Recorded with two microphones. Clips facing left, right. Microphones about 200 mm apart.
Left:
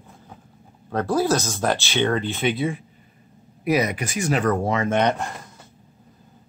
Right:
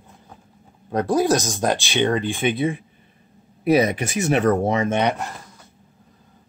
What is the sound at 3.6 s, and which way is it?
Speech, 30° right (ahead or behind).